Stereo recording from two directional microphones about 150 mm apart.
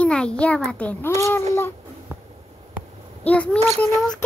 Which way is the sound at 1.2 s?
15° left (ahead or behind).